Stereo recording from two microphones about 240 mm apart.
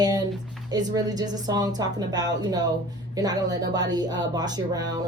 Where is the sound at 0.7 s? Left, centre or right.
Centre.